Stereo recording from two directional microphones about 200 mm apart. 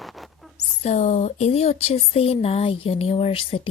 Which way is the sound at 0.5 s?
35° left (ahead or behind).